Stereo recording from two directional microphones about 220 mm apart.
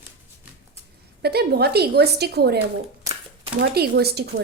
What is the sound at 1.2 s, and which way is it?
A woman's voice, 45° right (ahead or behind).